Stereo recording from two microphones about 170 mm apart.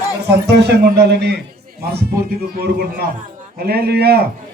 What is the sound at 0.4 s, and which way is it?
A man's voice, 75° right (ahead or behind).